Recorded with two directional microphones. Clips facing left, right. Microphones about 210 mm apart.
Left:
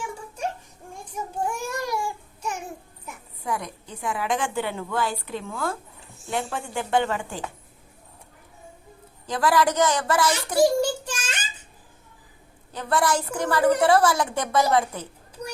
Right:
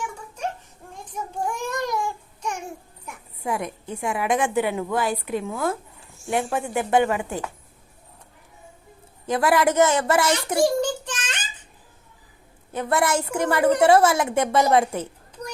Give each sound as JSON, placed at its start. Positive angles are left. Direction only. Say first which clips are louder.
{"t": 0.9, "sound": "a sound", "louder": "even", "side_deg": 10}
{"t": 3.4, "sound": "a woman's voice", "louder": "right 3 dB", "side_deg": -25}
{"t": 7.0, "sound": "speech", "louder": "right 4 dB", "side_deg": -10}
{"t": 9.2, "sound": "a woman's voice", "louder": "right 2 dB", "side_deg": -20}
{"t": 10.3, "sound": "a sound", "louder": "left 1 dB", "side_deg": 10}
{"t": 12.7, "sound": "a woman's voice", "louder": "right 2 dB", "side_deg": -20}